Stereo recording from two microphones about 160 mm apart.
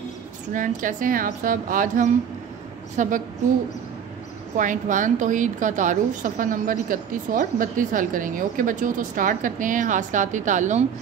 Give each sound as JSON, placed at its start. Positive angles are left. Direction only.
{"t": 0.5, "sound": "a woman's voice", "side_deg": -55}
{"t": 4.6, "sound": "a woman's voice", "side_deg": -55}